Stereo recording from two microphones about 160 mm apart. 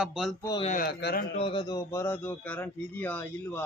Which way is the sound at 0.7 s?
80° left.